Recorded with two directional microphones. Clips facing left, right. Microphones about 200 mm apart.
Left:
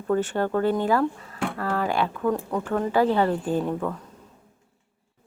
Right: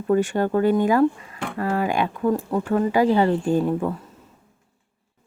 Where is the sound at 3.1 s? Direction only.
Centre (ahead or behind).